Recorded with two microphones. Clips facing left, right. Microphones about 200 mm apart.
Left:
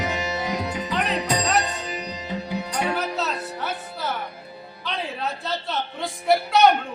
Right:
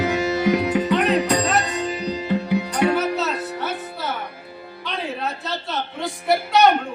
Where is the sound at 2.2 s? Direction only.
60° right (ahead or behind).